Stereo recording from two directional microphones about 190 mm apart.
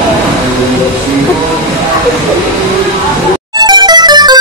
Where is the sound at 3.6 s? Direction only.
20° right (ahead or behind).